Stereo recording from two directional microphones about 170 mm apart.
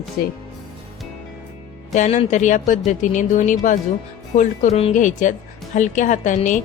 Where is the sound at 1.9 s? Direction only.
45° left (ahead or behind).